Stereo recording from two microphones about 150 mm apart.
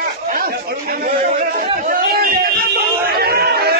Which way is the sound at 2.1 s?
90° right.